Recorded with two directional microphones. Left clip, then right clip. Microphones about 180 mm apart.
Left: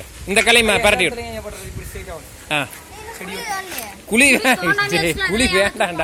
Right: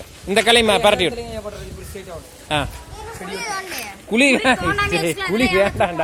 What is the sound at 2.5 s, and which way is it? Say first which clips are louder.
Speech: left 1 dB; 20° right (ahead or behind).